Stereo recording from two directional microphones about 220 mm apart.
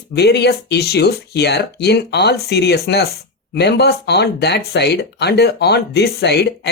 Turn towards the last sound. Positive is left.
turn(degrees=50)  # may be behind; listen again after turning